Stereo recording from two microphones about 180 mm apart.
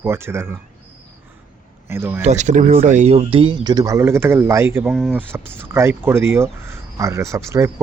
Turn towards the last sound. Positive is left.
turn(degrees=-15)  # may be behind; listen again after turning